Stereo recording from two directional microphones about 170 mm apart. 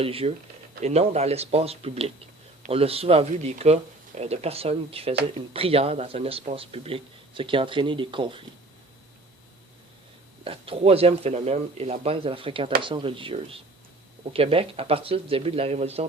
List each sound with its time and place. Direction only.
0.0 s a man's voice: 35° right (ahead or behind)
10.4 s a man's voice: 35° right (ahead or behind)